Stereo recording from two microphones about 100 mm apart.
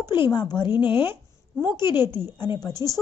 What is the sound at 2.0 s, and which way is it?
Speech, 20° right (ahead or behind).